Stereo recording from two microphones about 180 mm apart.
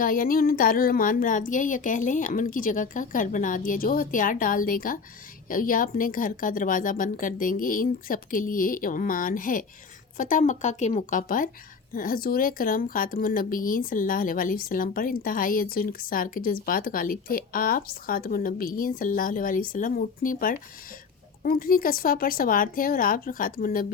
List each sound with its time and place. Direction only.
0.0 s speech: 50° left (ahead or behind)